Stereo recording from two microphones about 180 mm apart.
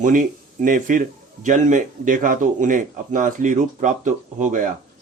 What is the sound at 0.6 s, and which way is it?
Speech, 50° right (ahead or behind).